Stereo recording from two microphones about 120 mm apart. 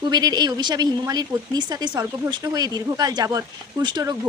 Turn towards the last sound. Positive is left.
turn(degrees=-35)  # may be behind; listen again after turning